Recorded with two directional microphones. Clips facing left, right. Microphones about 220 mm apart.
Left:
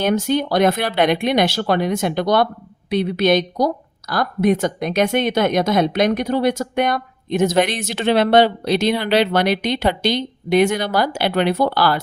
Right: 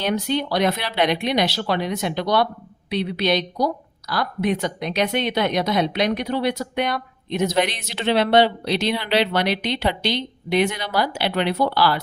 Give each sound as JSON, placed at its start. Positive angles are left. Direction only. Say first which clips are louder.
{"t": 0.0, "sound": "a woman's voice", "louder": "left 4 dB", "side_deg": 45}